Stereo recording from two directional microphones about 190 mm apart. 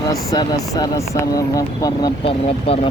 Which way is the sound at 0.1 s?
20° left (ahead or behind).